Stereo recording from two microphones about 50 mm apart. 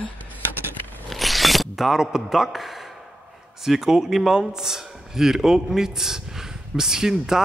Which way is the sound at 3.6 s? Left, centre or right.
Centre.